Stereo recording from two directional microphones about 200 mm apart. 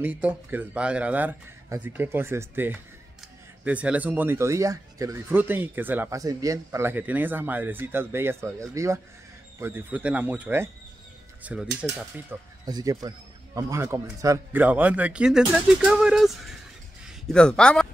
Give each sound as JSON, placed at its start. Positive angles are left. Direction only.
{"t": 0.0, "sound": "a man's voice", "side_deg": -10}
{"t": 12.3, "sound": "a man's voice", "side_deg": -20}